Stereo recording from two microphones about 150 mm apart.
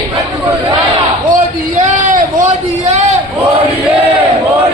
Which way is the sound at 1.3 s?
60° right (ahead or behind).